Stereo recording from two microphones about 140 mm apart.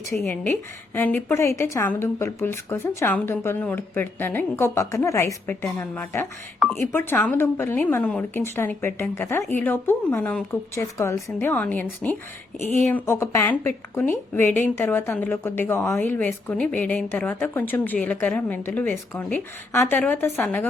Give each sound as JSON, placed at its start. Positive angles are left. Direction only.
{"t": 0.2, "sound": "a woman's voice", "side_deg": 15}